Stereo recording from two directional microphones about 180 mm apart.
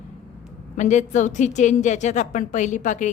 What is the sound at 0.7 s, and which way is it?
A woman's voice, 40° left (ahead or behind).